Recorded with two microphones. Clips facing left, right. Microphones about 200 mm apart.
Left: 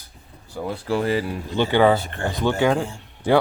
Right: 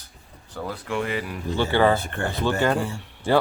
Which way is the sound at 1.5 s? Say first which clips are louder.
Left 3 dB; 15° left (ahead or behind).